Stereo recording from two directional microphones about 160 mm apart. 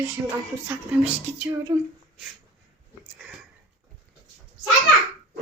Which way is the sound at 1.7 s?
25° right (ahead or behind).